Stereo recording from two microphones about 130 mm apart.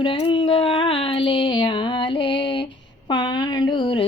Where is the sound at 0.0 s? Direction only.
40° left (ahead or behind).